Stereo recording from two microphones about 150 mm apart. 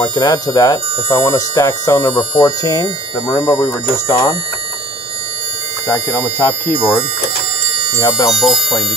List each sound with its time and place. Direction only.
0.0 s speech: 25° left (ahead or behind)
5.9 s speech: 20° left (ahead or behind)
8.3 s speech: centre (ahead or behind)